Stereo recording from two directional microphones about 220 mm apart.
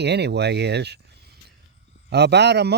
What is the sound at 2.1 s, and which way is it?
Speech, 50° right (ahead or behind).